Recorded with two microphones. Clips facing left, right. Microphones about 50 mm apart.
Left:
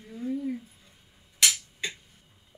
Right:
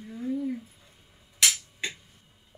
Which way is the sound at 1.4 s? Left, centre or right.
Centre.